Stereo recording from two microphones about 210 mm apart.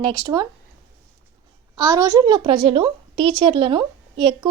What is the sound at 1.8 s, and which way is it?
Speech, 15° right (ahead or behind).